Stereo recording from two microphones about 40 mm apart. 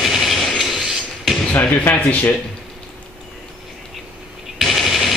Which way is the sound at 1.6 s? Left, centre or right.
Left.